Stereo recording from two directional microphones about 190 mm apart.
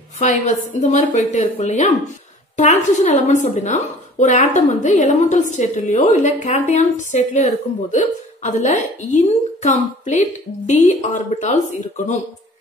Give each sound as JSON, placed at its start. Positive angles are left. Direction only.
{"t": 0.2, "sound": "a woman's voice", "side_deg": 40}